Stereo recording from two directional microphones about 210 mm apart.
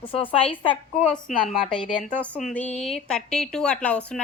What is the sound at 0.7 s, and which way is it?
Speech, 5° left (ahead or behind).